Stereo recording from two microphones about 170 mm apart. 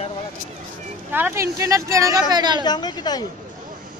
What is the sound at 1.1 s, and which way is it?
A woman's voice, 10° right (ahead or behind).